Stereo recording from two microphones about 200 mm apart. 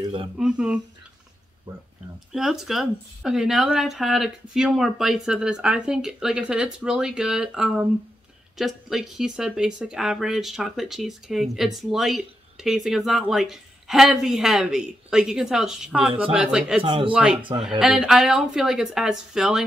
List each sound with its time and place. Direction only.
0.4 s speech: 5° right (ahead or behind)
2.3 s speech: centre (ahead or behind)
16.8 s speech: 25° right (ahead or behind)
17.1 s speech: 5° right (ahead or behind)
17.4 s speech: 25° right (ahead or behind)
17.6 s speech: 5° right (ahead or behind)